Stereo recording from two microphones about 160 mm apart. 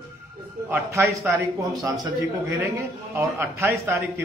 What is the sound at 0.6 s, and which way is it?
A man's voice, 15° right (ahead or behind).